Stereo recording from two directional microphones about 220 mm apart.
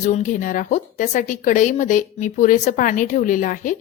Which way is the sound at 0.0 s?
35° left (ahead or behind).